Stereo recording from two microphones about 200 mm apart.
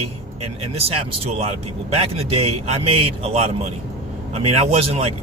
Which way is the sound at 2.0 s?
30° right (ahead or behind).